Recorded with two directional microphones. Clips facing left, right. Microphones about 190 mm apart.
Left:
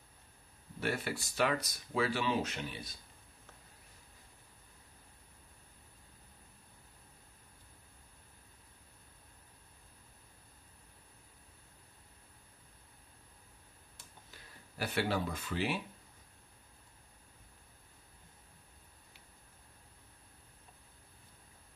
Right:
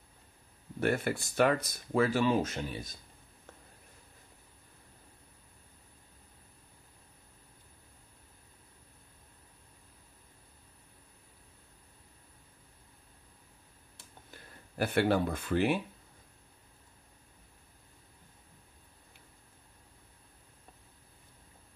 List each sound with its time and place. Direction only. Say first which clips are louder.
0.7 s speech: right 6 dB; 55° right (ahead or behind)
14.3 s speech: right 7 dB; 55° right (ahead or behind)